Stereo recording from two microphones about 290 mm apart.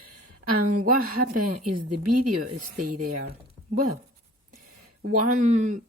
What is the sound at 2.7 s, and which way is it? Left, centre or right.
Speech, right.